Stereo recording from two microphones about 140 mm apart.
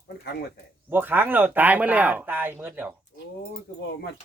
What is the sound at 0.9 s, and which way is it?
Speech, 15° right (ahead or behind).